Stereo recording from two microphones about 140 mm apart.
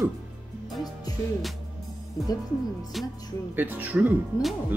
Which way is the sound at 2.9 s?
Centre (ahead or behind).